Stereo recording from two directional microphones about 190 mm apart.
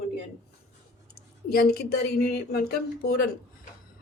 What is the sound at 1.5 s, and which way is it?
Speech, 55° left (ahead or behind).